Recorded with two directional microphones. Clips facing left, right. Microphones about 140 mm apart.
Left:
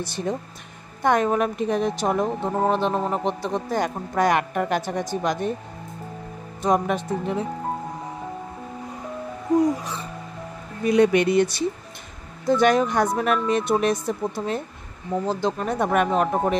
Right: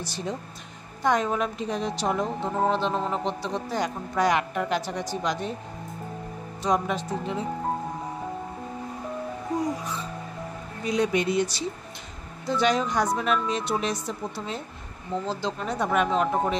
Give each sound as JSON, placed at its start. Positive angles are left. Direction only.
{"t": 0.0, "sound": "speech", "side_deg": 55}
{"t": 6.6, "sound": "speech", "side_deg": 55}
{"t": 10.9, "sound": "speech", "side_deg": 60}